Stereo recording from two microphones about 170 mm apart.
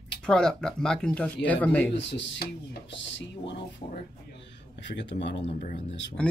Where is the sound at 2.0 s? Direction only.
90° left.